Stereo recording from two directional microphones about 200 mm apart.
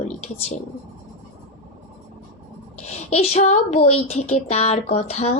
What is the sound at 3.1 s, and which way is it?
Speech, 30° left (ahead or behind).